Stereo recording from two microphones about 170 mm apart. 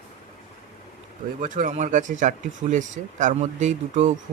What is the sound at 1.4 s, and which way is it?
Speech, 50° right (ahead or behind).